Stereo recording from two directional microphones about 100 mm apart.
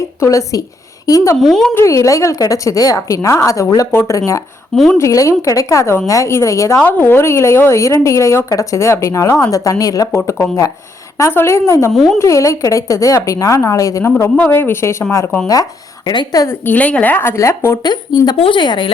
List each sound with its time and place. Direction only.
0.2 s a woman's voice: 30° left (ahead or behind)
1.4 s speech: centre (ahead or behind)
1.7 s a woman's voice: 30° left (ahead or behind)
4.7 s speech: 5° left (ahead or behind)
4.9 s a woman's voice: 30° left (ahead or behind)
11.9 s speech: centre (ahead or behind)
12.2 s a woman's voice: 30° left (ahead or behind)
14.5 s a woman's voice: 25° left (ahead or behind)
16.0 s a woman's voice: 40° left (ahead or behind)
16.5 s a woman's voice: 15° left (ahead or behind)
17.8 s speech: 45° left (ahead or behind)
18.3 s a woman's voice: 60° left (ahead or behind)